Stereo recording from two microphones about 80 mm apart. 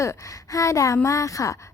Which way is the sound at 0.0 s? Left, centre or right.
Left.